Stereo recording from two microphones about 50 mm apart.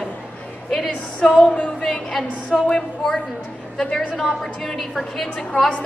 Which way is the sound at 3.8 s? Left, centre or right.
Centre.